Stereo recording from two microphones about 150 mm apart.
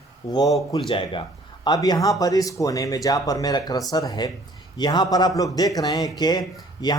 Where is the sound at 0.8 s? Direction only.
35° left (ahead or behind).